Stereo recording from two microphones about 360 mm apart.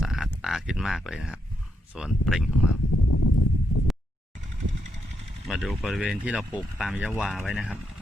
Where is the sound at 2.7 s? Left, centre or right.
Left.